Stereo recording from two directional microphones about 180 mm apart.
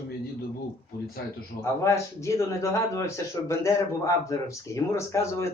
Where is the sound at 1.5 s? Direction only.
15° left (ahead or behind).